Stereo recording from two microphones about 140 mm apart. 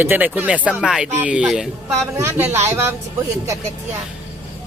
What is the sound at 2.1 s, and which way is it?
Speech, 20° right (ahead or behind).